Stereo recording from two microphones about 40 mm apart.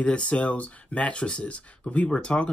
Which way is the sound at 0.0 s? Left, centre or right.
Left.